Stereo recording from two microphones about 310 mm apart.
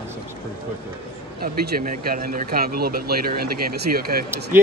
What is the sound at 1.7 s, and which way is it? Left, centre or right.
Speech, right.